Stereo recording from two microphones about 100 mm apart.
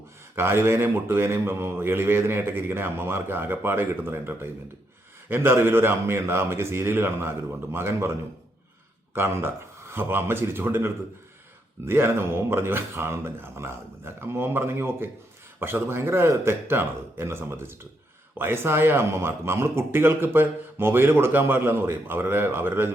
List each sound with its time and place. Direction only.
0.3 s speech: 25° right (ahead or behind)
9.1 s speech: 25° right (ahead or behind)